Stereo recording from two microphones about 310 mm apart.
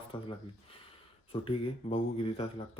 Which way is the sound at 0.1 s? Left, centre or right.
Centre.